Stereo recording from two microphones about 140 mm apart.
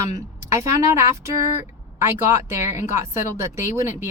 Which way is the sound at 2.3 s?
20° right (ahead or behind).